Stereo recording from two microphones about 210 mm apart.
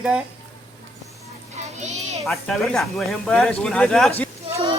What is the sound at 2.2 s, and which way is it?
Speech, centre (ahead or behind).